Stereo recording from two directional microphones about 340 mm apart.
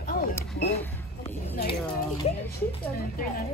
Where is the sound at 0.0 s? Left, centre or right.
Left.